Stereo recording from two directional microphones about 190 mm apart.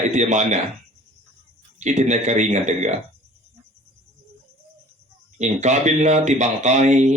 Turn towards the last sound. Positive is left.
turn(degrees=-40)  # may be behind; listen again after turning